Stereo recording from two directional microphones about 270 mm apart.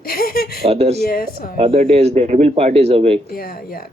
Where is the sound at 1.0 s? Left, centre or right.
Left.